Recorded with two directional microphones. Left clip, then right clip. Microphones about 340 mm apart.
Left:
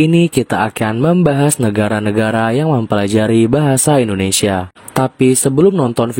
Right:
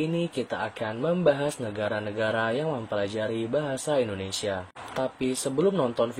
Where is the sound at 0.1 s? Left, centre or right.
Left.